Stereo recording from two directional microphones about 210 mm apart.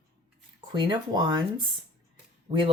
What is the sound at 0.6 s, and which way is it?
Speech, 20° right (ahead or behind).